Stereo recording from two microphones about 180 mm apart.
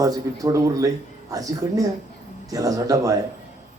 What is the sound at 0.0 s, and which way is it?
Speech, 20° right (ahead or behind).